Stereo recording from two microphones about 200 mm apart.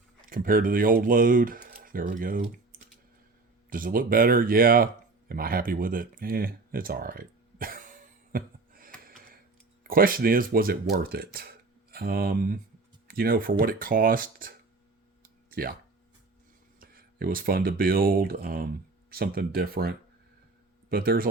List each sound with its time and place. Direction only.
0.3 s speech: 45° right (ahead or behind)
5.3 s a sound: 45° right (ahead or behind)
9.0 s tick: 45° right (ahead or behind)
9.8 s speech: 45° right (ahead or behind)
15.2 s a sound: 45° right (ahead or behind)
16.8 s speech: 45° right (ahead or behind)